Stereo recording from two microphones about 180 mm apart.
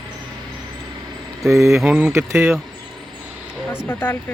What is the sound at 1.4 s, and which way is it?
Speech, 15° right (ahead or behind).